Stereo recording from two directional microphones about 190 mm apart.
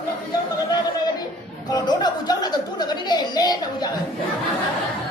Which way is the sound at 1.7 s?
20° left (ahead or behind).